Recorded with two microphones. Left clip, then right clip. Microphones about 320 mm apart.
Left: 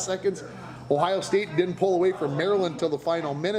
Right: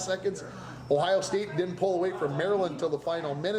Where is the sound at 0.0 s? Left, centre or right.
Left.